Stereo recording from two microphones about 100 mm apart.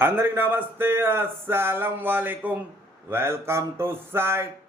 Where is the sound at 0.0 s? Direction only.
20° right (ahead or behind).